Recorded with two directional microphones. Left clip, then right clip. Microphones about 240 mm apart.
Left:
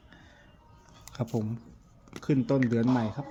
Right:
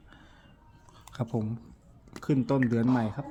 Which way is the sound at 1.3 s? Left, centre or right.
Centre.